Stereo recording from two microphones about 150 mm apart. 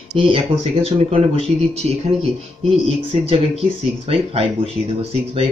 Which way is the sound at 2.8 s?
40° right (ahead or behind).